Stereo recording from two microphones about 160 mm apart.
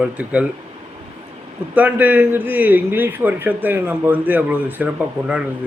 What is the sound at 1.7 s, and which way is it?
A man's voice, 10° right (ahead or behind).